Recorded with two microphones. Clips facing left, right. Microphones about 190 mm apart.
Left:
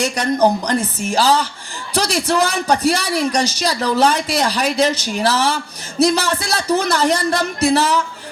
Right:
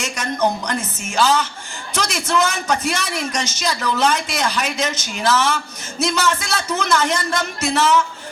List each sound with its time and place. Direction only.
0.0 s a man's voice: 35° left (ahead or behind)